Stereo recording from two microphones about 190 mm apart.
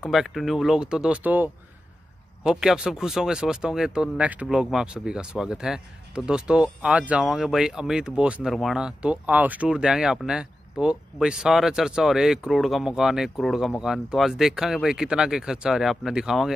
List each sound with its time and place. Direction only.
0.0 s speech: centre (ahead or behind)